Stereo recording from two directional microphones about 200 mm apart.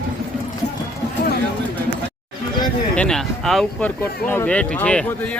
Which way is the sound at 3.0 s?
5° left (ahead or behind).